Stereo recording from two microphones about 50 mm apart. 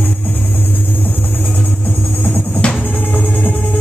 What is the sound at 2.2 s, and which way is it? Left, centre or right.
Music, left.